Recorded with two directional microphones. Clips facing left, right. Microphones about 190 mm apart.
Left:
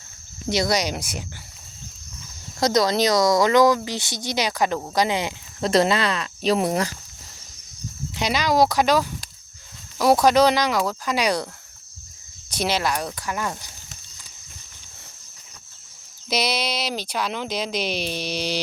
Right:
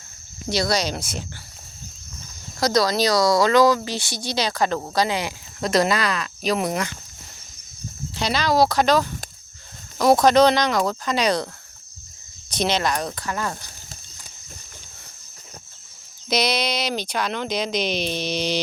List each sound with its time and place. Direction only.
0.5 s speech: 20° left (ahead or behind)
2.6 s speech: 25° left (ahead or behind)
8.1 s speech: 15° left (ahead or behind)
12.5 s speech: 10° left (ahead or behind)
16.3 s speech: 5° left (ahead or behind)